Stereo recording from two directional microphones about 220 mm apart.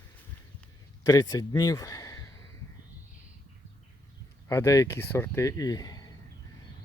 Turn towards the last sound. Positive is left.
turn(degrees=15)  # may be behind; listen again after turning